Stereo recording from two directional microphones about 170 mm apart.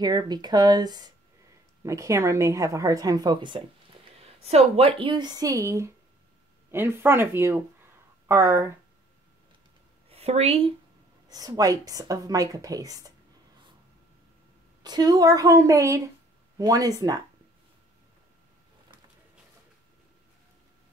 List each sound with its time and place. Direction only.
0.0 s a woman's voice: 25° right (ahead or behind)
4.2 s a woman's voice: 40° right (ahead or behind); by 8.6 s 15° right (ahead or behind)
10.0 s a woman's voice: 35° right (ahead or behind)
11.2 s a woman's voice: 20° right (ahead or behind)
14.8 s a woman's voice: 25° right (ahead or behind)